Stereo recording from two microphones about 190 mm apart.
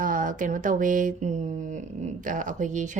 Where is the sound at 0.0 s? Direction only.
45° right (ahead or behind).